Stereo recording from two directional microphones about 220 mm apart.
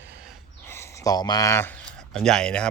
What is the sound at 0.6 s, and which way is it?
Speech, 10° left (ahead or behind).